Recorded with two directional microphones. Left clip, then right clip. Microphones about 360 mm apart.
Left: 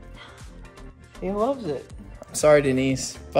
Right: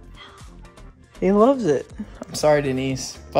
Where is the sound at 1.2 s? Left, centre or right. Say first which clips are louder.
Right 8 dB; right.